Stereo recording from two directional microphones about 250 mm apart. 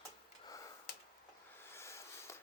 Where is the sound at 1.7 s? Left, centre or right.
Centre.